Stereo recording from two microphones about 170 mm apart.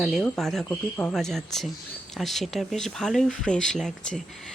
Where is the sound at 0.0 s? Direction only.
Centre (ahead or behind).